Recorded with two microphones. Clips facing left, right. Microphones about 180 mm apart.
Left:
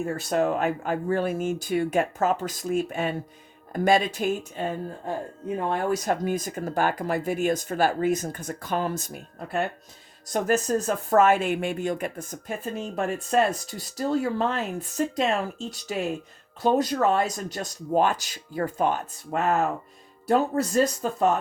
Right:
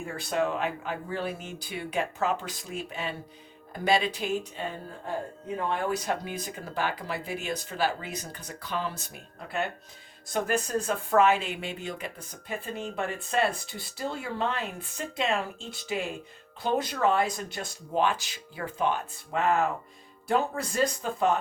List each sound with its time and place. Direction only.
0.0 s speech: 45° left (ahead or behind)
5.7 s speech: 45° left (ahead or behind)